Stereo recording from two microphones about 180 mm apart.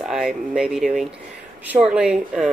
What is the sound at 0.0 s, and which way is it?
Speech, centre (ahead or behind).